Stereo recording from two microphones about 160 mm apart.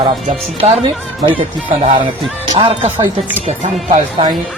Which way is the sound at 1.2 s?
30° right (ahead or behind).